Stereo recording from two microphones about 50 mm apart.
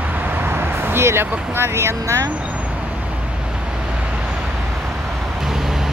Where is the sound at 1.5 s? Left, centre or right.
Right.